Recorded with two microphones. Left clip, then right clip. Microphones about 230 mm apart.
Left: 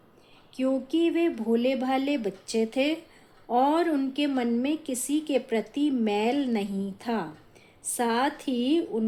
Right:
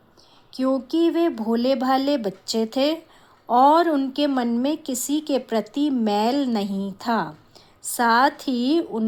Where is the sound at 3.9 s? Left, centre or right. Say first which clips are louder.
Right 5 dB; centre.